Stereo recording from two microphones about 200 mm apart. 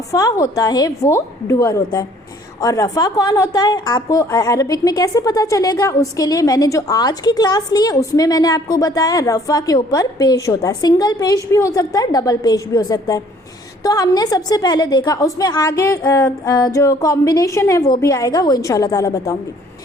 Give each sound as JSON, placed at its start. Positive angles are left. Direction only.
{"t": 0.1, "sound": "a woman's voice", "side_deg": 15}